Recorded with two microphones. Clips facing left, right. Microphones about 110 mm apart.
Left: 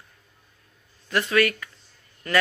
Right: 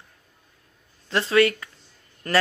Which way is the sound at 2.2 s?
40° right (ahead or behind).